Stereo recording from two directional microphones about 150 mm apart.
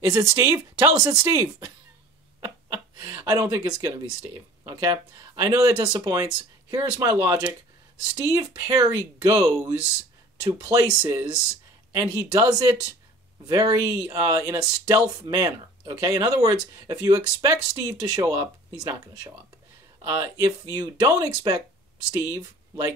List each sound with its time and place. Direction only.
0.0 s speech: 20° right (ahead or behind)
20.0 s speech: 20° right (ahead or behind)